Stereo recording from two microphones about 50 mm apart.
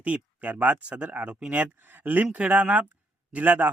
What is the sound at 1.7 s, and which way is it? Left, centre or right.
Speech, right.